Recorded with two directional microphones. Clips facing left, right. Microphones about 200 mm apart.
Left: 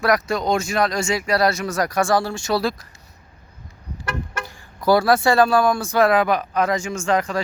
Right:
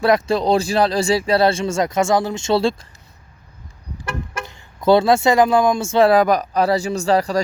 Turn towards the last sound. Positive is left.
turn(degrees=-35)  # may be behind; listen again after turning